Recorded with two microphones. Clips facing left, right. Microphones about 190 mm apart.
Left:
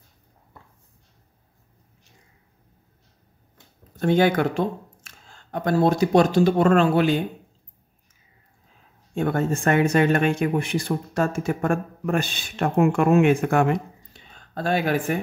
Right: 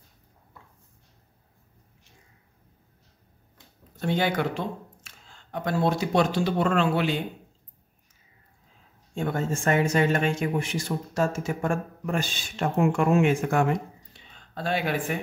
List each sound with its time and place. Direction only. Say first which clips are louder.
3.9 s speech: left 7 dB; 50° left (ahead or behind)
9.1 s speech: left 5 dB; 60° left (ahead or behind)
14.3 s speech: left 4 dB; 45° left (ahead or behind)